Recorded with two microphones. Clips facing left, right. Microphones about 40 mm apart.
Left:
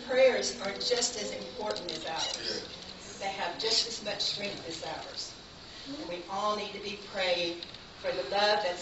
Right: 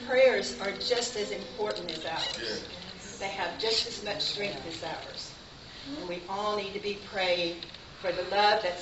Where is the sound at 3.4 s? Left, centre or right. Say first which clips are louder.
Right 3 dB; centre.